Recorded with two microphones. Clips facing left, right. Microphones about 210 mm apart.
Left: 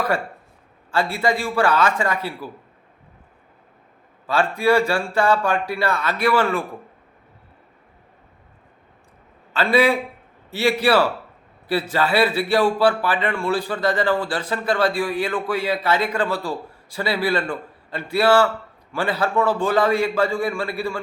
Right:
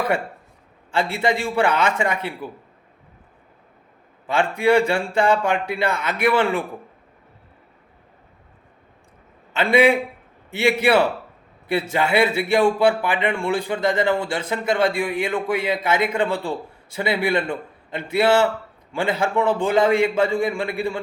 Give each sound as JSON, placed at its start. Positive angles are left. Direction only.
{"t": 1.1, "sound": "a man's voice", "side_deg": -20}
{"t": 4.3, "sound": "a man's voice", "side_deg": -20}
{"t": 9.6, "sound": "a man's voice", "side_deg": -20}